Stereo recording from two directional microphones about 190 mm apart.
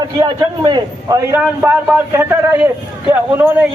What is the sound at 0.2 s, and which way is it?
Speech, 20° right (ahead or behind).